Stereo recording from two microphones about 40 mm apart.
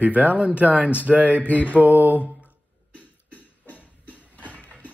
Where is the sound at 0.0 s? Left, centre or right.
Right.